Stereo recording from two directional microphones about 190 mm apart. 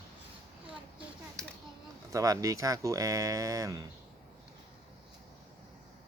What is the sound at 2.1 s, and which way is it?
Speech, 15° right (ahead or behind).